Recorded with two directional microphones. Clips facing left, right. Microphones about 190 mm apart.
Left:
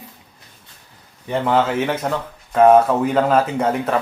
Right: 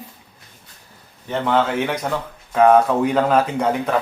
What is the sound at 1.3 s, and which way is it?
Speech, 5° left (ahead or behind).